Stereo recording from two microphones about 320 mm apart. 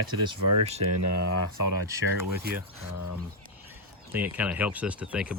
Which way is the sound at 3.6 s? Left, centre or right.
Centre.